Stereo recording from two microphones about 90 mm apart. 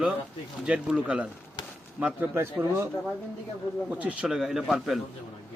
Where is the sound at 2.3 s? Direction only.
25° right (ahead or behind).